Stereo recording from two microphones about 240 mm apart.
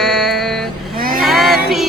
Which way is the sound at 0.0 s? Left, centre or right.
Centre.